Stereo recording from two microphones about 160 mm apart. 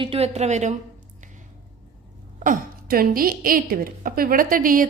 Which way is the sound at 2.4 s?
60° right (ahead or behind).